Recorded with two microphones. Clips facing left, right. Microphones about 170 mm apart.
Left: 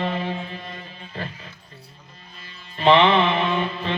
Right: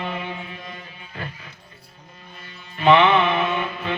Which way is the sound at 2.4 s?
30° left (ahead or behind).